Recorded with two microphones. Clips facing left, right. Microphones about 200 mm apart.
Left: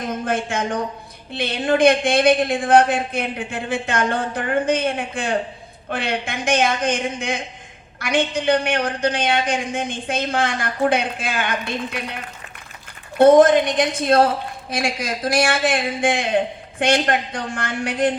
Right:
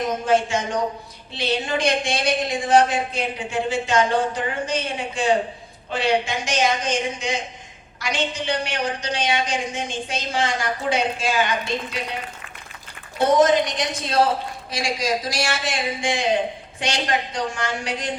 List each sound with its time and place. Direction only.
0.3 s a woman's voice: 55° left (ahead or behind)